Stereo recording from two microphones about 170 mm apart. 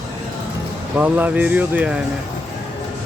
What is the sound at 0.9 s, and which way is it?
Speech, 10° right (ahead or behind).